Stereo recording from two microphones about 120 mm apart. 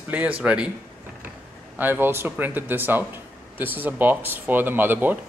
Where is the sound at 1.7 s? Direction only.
15° right (ahead or behind).